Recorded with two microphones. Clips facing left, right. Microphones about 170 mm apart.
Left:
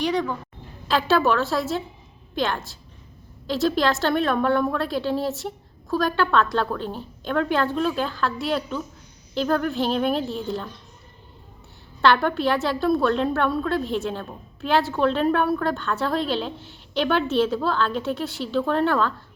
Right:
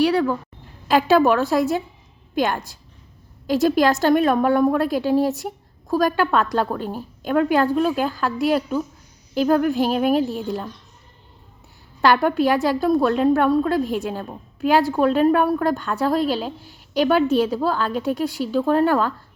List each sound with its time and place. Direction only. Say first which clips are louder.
0.0 s a woman's voice: right 6 dB; 5° right (ahead or behind)
12.0 s a woman's voice: right 3 dB; 10° right (ahead or behind)